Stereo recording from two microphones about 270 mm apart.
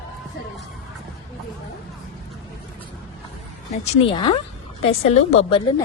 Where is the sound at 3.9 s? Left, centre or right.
Left.